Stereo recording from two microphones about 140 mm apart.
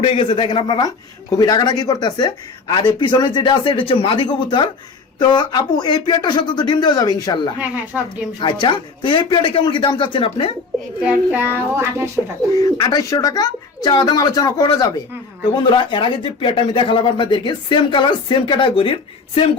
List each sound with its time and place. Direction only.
0.0 s speech: 35° left (ahead or behind)
7.9 s speech: 5° right (ahead or behind)
8.4 s speech: 35° left (ahead or behind)
11.0 s a child's voice: 10° right (ahead or behind)
12.5 s speech: 25° left (ahead or behind)